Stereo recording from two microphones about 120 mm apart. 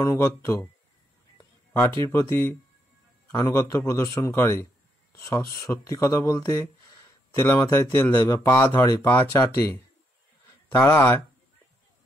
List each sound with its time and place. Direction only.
0.0 s a man's voice: 25° left (ahead or behind)
1.7 s a man's voice: 20° left (ahead or behind)
7.4 s a man's voice: 15° left (ahead or behind)
10.7 s a man's voice: 20° left (ahead or behind)